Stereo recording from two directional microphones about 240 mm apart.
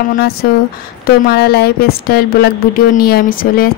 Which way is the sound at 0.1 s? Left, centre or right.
Left.